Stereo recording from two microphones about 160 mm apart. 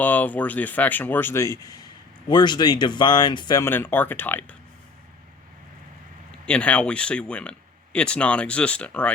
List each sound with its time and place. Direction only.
0.0 s speech: 10° left (ahead or behind)
6.4 s speech: 5° left (ahead or behind)